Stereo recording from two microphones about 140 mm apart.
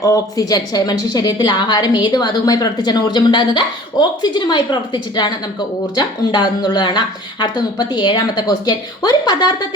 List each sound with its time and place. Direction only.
0.0 s speech: 25° left (ahead or behind)